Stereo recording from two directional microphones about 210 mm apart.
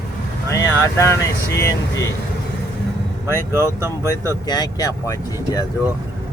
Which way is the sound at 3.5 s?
10° right (ahead or behind).